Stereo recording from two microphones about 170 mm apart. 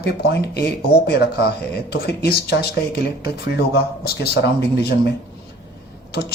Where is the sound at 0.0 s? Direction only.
70° left (ahead or behind).